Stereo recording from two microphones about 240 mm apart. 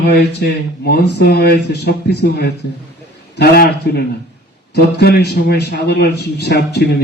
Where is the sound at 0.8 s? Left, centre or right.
Left.